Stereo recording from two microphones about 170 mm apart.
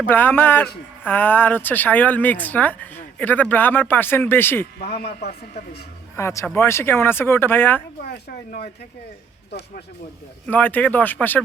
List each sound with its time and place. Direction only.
0.0 s speech: 10° left (ahead or behind)
4.9 s speech: 65° left (ahead or behind)
6.1 s speech: 15° left (ahead or behind)
9.5 s speech: 70° left (ahead or behind)
10.4 s speech: 10° left (ahead or behind)